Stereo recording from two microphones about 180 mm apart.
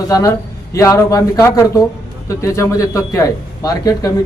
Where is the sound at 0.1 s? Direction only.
20° left (ahead or behind).